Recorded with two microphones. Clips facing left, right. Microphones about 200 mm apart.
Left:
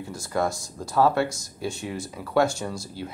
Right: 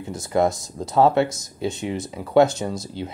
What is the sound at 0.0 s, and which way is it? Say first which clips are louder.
Speech: right 6 dB; 20° right (ahead or behind).